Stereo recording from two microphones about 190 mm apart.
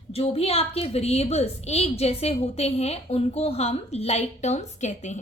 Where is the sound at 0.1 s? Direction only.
30° left (ahead or behind).